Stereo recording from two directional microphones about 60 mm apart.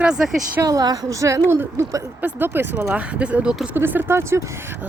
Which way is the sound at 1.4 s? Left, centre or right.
Right.